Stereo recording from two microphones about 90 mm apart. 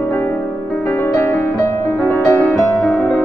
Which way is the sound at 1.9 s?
Centre (ahead or behind).